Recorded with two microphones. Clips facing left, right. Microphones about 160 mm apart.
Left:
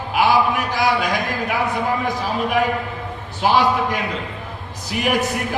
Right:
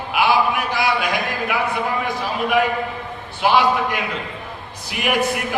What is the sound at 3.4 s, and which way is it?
A man's voice, 40° left (ahead or behind).